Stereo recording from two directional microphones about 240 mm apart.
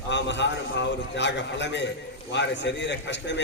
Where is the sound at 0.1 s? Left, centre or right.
Left.